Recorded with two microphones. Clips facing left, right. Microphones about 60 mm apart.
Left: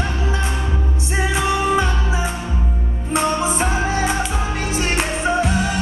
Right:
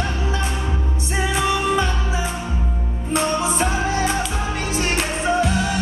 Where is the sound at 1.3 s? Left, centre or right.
Left.